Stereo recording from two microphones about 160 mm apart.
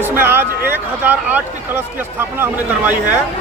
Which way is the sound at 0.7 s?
10° right (ahead or behind).